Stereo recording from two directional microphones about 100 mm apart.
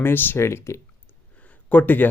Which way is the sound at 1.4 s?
15° left (ahead or behind).